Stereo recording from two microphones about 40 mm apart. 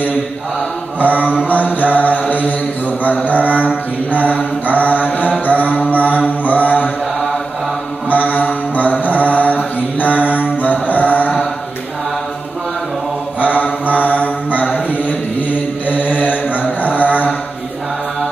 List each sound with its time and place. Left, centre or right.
1.0 s mantra: left
3.0 s music: left
4.1 s mantra: left
8.1 s mantra: left
14.0 s mantra: left